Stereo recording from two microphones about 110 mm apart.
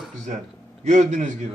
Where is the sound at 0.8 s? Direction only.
90° right.